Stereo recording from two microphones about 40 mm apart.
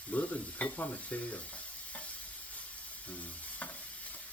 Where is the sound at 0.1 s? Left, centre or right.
Left.